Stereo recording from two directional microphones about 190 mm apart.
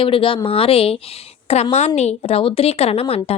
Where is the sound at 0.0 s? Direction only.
30° left (ahead or behind).